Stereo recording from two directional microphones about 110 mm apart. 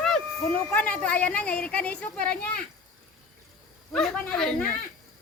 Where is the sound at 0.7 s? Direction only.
15° left (ahead or behind).